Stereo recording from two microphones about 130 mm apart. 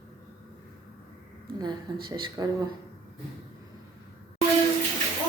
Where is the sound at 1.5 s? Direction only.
35° right (ahead or behind).